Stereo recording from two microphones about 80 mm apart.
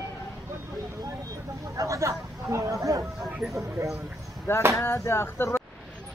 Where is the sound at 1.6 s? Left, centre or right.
Right.